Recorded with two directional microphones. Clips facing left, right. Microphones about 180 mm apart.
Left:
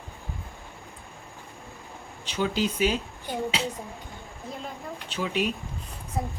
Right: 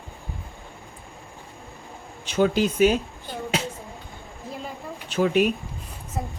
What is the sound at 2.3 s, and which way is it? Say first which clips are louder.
Speech: right 6 dB; 50° right (ahead or behind).